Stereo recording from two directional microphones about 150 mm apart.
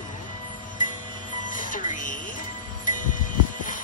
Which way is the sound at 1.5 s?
60° left (ahead or behind).